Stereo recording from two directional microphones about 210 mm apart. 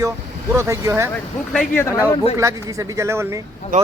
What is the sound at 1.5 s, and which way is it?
Speech, 10° left (ahead or behind).